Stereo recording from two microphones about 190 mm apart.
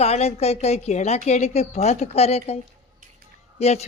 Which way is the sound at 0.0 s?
35° left (ahead or behind).